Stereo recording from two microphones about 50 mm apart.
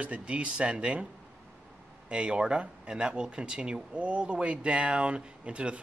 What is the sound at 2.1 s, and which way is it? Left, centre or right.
Speech, centre.